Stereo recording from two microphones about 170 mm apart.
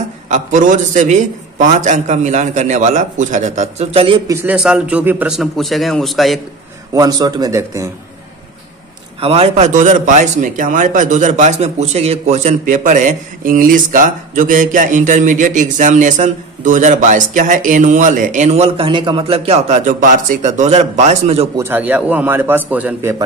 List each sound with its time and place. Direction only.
0.3 s a man's voice: 50° right (ahead or behind)
4.3 s a man's voice: 10° right (ahead or behind)
6.9 s a man's voice: 20° right (ahead or behind)
9.2 s a man's voice: 35° right (ahead or behind)
21.5 s a man's voice: 10° right (ahead or behind)